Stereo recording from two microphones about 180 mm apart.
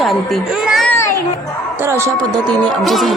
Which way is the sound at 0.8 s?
15° left (ahead or behind).